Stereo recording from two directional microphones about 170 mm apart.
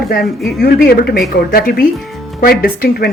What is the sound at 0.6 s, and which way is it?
Speech, 65° left (ahead or behind).